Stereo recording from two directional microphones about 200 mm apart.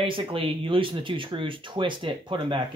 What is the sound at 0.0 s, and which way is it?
Speech, 25° right (ahead or behind).